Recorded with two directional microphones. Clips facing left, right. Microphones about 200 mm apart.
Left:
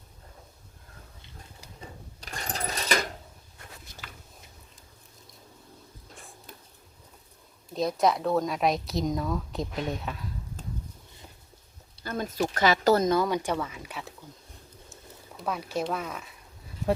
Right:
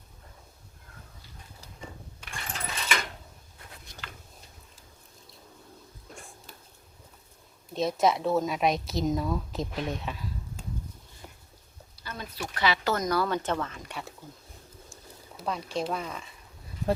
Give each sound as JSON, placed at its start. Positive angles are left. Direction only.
{"t": 2.2, "sound": "a sound", "side_deg": 40}
{"t": 7.7, "sound": "a woman's voice", "side_deg": 0}
{"t": 12.0, "sound": "speech", "side_deg": 45}
{"t": 13.0, "sound": "speech", "side_deg": 20}
{"t": 15.4, "sound": "a woman's voice", "side_deg": 5}